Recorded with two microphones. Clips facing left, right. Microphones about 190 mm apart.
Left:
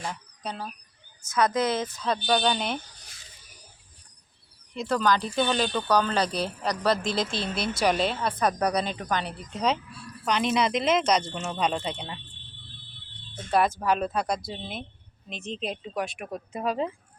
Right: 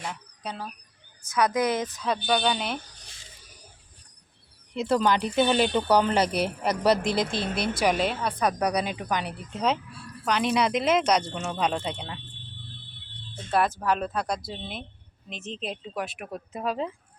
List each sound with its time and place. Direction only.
0.0 s speech: 5° right (ahead or behind)
1.3 s a woman's voice: 15° right (ahead or behind)
4.7 s speech: 20° right (ahead or behind)
7.0 s speech: 60° right (ahead or behind)
7.9 s a woman's voice: 10° right (ahead or behind)
13.5 s speech: centre (ahead or behind)